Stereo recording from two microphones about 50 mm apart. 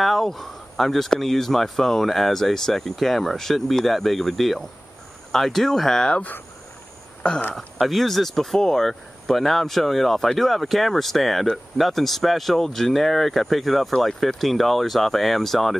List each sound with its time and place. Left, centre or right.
0.0 s speech: centre
7.2 s speech: left
7.8 s speech: centre